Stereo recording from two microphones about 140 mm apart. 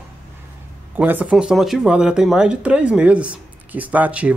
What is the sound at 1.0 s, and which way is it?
Speech, 10° right (ahead or behind).